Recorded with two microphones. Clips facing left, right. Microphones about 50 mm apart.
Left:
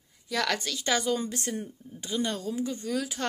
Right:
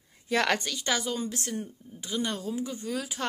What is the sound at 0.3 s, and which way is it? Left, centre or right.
Speech, right.